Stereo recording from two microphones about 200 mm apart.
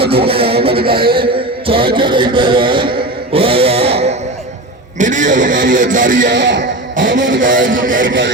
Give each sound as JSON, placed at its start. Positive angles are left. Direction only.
{"t": 0.1, "sound": "a man's voice", "side_deg": -30}
{"t": 2.0, "sound": "a sound", "side_deg": -25}
{"t": 3.3, "sound": "guitar", "side_deg": -30}
{"t": 4.9, "sound": "speech", "side_deg": -40}
{"t": 6.2, "sound": "speech", "side_deg": -60}
{"t": 7.4, "sound": "speech", "side_deg": -40}
{"t": 8.0, "sound": "speech", "side_deg": -65}